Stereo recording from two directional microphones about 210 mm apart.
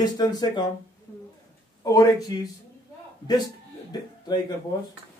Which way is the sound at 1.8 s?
15° left (ahead or behind).